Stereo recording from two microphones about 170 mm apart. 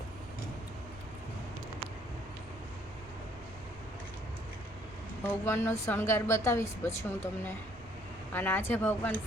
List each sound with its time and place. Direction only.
5.2 s a woman's voice: 15° left (ahead or behind)
8.3 s a woman's voice: 10° left (ahead or behind)